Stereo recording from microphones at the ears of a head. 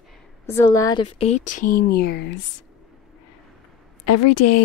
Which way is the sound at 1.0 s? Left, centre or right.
Left.